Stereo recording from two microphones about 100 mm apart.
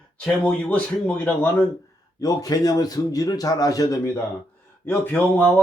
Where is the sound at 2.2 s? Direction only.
40° left (ahead or behind).